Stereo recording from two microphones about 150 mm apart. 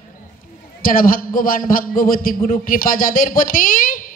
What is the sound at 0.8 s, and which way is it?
A man's voice, 70° left (ahead or behind).